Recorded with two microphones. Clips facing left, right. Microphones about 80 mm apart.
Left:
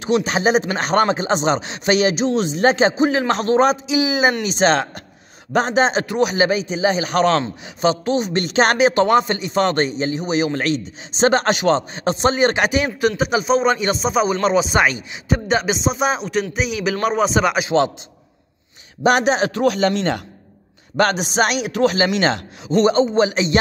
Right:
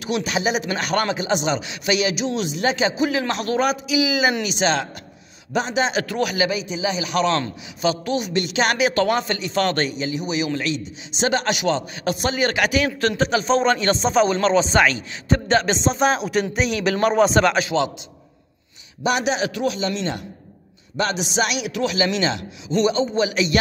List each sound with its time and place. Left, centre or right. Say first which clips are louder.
0.0 s speech: left 5 dB; left
6.0 s a man's voice: left 4 dB; left
6.4 s speech: left 5 dB; left
7.3 s speech: left 4 dB; left
8.9 s a man's voice: left 5 dB; left
10.0 s speech: left 4 dB; left
13.2 s speech: even; centre
19.0 s speech: left 5 dB; left
19.6 s speech: left 6 dB; left